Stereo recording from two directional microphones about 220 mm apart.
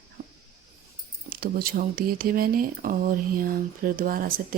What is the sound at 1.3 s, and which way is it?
Speech, 40° right (ahead or behind).